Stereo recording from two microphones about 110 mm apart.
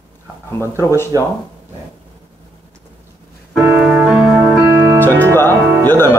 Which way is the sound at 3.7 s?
10° right (ahead or behind).